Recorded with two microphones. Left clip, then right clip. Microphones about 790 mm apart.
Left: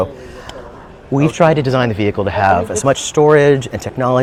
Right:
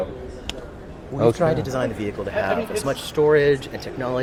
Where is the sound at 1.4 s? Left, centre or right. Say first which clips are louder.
Left 9 dB; left.